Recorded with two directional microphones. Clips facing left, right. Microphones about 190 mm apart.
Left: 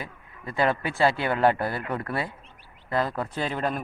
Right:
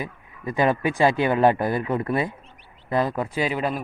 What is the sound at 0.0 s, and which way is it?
Speech, 15° right (ahead or behind).